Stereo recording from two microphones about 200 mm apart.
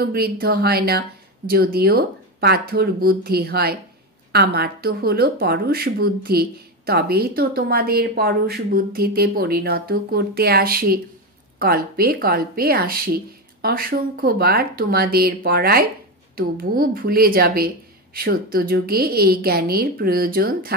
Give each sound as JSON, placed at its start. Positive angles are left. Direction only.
{"t": 0.0, "sound": "speech", "side_deg": -50}